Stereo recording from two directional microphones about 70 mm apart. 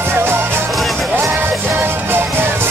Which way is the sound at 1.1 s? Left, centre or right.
Right.